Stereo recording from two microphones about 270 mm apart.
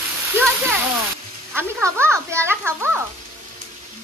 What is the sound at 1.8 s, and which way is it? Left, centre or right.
A child's voice, centre.